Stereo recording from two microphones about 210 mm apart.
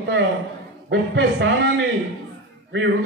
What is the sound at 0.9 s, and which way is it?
Speech, 55° right (ahead or behind).